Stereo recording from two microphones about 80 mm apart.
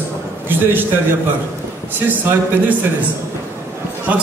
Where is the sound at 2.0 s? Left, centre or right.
Right.